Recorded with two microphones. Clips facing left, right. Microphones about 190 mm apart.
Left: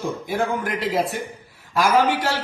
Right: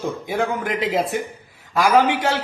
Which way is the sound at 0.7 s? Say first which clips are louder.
Right 3 dB; 20° right (ahead or behind).